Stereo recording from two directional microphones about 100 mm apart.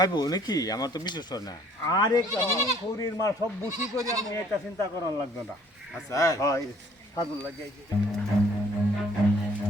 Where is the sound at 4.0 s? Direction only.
35° right (ahead or behind).